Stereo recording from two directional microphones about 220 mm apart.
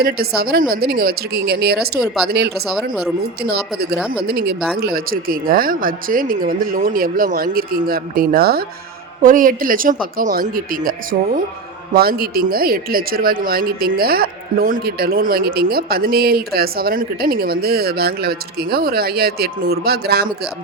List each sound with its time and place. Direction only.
0.0 s speech: 45° right (ahead or behind)